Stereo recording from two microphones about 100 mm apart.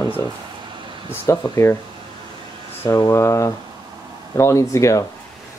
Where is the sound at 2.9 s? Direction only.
35° left (ahead or behind).